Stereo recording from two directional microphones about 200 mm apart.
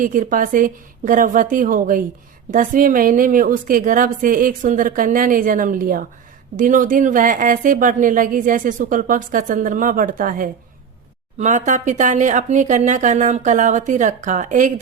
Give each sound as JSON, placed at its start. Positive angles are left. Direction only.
{"t": 0.0, "sound": "a woman's voice", "side_deg": -45}